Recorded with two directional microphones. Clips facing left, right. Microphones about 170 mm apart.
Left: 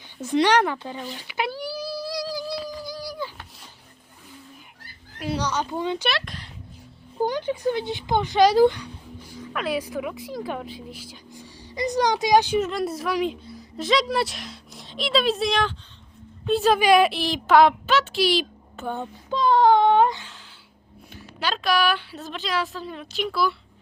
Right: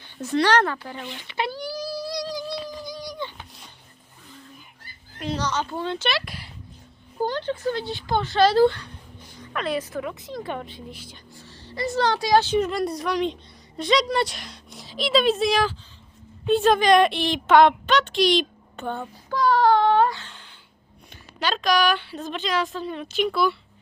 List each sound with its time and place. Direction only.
0.2 s speech: 15° left (ahead or behind)
1.3 s child singing: 5° left (ahead or behind)
5.2 s speech: 10° left (ahead or behind)
6.1 s speech: 5° right (ahead or behind)
7.2 s speech: 10° left (ahead or behind)
12.5 s a woman's voice: 5° left (ahead or behind)
18.9 s child singing: 20° left (ahead or behind)
21.3 s a woman's voice: 5° left (ahead or behind)